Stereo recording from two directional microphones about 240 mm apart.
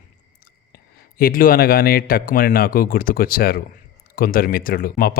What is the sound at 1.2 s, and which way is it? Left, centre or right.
Speech, left.